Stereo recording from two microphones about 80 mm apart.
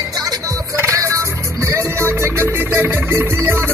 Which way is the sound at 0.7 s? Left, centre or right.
Right.